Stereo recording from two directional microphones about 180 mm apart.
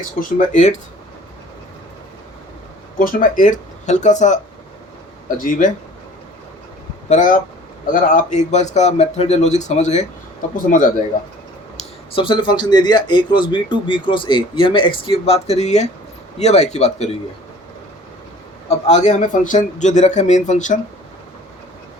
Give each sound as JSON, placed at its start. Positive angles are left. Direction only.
{"t": 0.2, "sound": "speech", "side_deg": 45}
{"t": 3.0, "sound": "speech", "side_deg": 50}
{"t": 5.4, "sound": "speech", "side_deg": 45}
{"t": 7.1, "sound": "speech", "side_deg": 45}
{"t": 11.8, "sound": "speech", "side_deg": 30}
{"t": 18.7, "sound": "speech", "side_deg": 40}